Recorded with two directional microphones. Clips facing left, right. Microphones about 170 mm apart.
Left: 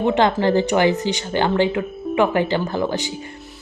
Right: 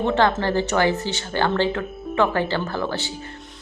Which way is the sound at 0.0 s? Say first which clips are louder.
Left 3 dB; 15° left (ahead or behind).